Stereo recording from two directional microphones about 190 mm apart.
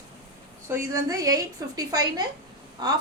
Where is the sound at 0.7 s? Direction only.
10° right (ahead or behind).